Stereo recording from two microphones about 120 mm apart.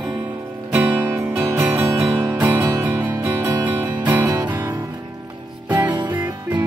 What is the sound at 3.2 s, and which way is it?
Music, 15° right (ahead or behind).